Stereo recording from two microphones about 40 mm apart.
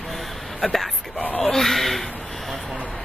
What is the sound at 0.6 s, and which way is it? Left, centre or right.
Speech, centre.